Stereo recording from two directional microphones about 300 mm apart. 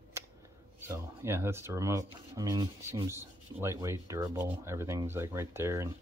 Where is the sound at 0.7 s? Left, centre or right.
Centre.